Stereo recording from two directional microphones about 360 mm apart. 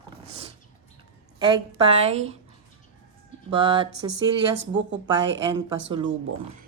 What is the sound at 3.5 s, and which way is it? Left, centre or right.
Speech, centre.